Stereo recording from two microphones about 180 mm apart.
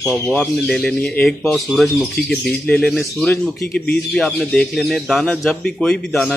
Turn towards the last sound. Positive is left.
turn(degrees=0)  # may be behind; listen again after turning